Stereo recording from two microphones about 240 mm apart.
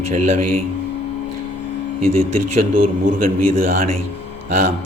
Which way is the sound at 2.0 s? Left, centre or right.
Right.